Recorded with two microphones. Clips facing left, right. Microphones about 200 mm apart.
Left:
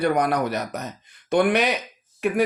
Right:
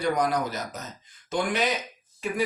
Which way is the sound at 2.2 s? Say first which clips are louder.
Left 7 dB; 60° left (ahead or behind).